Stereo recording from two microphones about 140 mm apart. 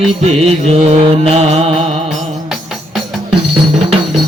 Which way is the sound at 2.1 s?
Centre (ahead or behind).